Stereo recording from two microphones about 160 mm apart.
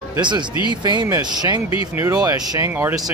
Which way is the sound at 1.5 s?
30° left (ahead or behind).